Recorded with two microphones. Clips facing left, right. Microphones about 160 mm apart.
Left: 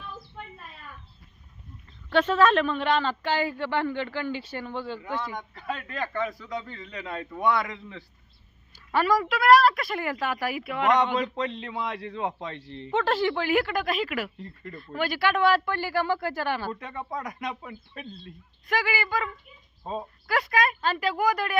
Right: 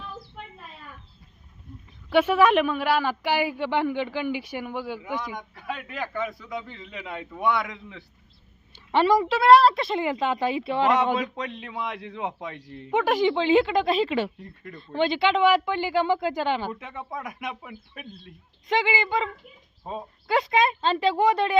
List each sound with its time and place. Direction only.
2.0 s a man's voice: 10° right (ahead or behind)
5.4 s a man's voice: centre (ahead or behind)
8.9 s a woman's voice: 25° right (ahead or behind)
10.9 s a man's voice: 5° right (ahead or behind); by 14.3 s 25° right (ahead or behind)
14.3 s a man's voice: centre (ahead or behind)
14.8 s a woman's voice: 25° right (ahead or behind)
16.8 s a man's voice: 5° right (ahead or behind)
18.7 s a woman's voice: 20° right (ahead or behind)
19.9 s a man's voice: 10° right (ahead or behind)
20.2 s a woman's voice: 25° right (ahead or behind)